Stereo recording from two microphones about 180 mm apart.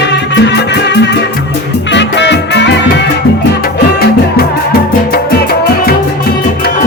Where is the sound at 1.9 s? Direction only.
75° left (ahead or behind).